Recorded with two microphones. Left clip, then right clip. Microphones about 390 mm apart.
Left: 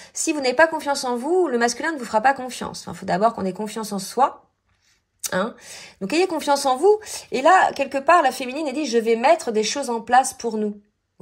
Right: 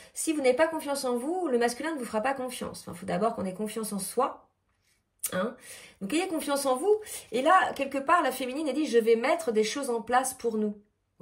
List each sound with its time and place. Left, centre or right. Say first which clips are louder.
0.2 s speech: left 7 dB; centre
6.0 s speech: left 10 dB; centre